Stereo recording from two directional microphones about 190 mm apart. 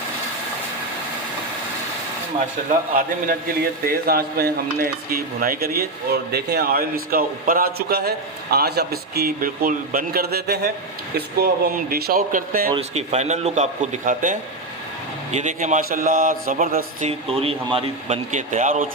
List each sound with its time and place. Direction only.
2.6 s a man's voice: 50° right (ahead or behind)
12.7 s a man's voice: 35° right (ahead or behind)